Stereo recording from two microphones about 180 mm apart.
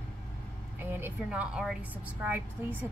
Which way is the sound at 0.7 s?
10° right (ahead or behind).